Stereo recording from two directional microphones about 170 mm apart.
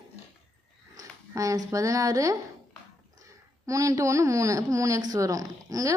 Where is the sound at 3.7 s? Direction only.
20° right (ahead or behind).